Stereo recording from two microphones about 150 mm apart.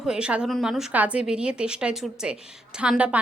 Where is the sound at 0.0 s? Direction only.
5° right (ahead or behind).